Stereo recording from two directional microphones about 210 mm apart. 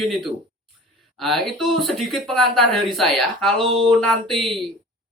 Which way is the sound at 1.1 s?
Centre (ahead or behind).